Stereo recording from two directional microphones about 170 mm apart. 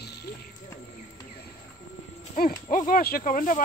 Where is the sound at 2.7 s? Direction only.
55° left (ahead or behind).